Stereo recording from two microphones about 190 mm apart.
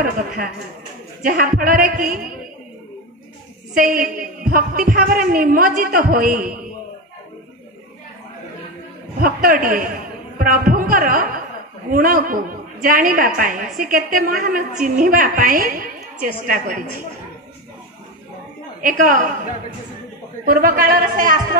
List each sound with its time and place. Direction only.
0.0 s a woman's voice: 50° right (ahead or behind)
3.7 s a woman's voice: 45° right (ahead or behind)
9.2 s a woman's voice: 50° right (ahead or behind)
18.8 s a woman's voice: 45° right (ahead or behind)
20.4 s a woman's voice: 50° right (ahead or behind)